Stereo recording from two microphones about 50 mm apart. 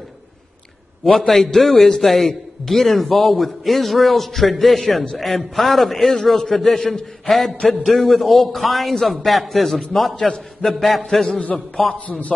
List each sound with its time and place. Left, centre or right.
1.1 s a man's voice: centre
10.1 s a man's voice: centre
10.6 s a man's voice: centre
11.9 s a man's voice: left